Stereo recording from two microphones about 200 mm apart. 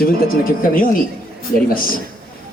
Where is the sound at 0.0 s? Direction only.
45° left (ahead or behind).